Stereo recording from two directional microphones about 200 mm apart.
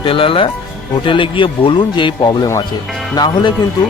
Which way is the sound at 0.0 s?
25° left (ahead or behind).